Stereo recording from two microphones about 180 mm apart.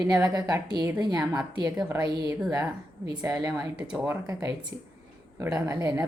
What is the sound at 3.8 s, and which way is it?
Speech, 10° right (ahead or behind).